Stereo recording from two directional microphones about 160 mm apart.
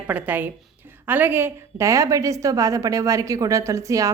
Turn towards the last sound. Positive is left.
turn(degrees=-20)  # may be behind; listen again after turning